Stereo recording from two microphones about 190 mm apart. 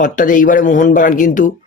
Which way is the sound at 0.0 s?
45° left (ahead or behind).